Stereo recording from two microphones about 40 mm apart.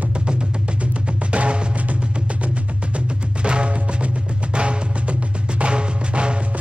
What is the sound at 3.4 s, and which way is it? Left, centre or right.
Music, right.